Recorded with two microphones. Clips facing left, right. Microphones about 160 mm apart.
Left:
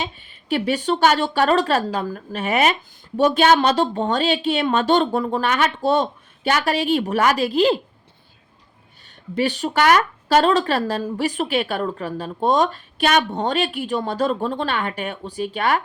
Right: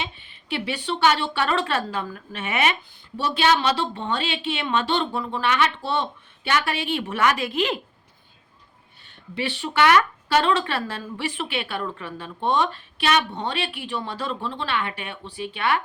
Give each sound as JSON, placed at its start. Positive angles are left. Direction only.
{"t": 0.0, "sound": "speech", "side_deg": 40}
{"t": 9.3, "sound": "speech", "side_deg": 40}